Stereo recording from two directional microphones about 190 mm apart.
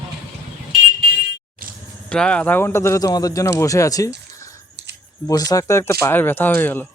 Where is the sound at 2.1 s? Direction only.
5° left (ahead or behind).